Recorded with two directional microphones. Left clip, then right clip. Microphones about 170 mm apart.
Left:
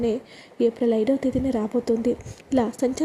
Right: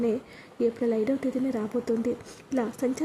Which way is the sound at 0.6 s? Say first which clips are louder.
Left 5 dB; 15° left (ahead or behind).